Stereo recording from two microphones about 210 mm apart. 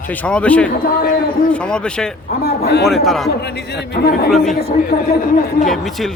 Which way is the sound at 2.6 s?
50° left (ahead or behind).